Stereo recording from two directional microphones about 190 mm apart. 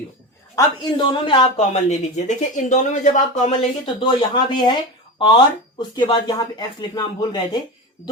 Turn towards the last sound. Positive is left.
turn(degrees=20)  # may be behind; listen again after turning